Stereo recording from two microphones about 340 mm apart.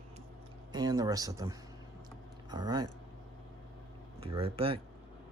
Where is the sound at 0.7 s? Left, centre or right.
Centre.